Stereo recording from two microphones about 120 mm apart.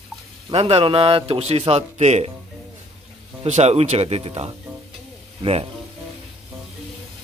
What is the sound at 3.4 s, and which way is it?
A man's voice, 65° right (ahead or behind).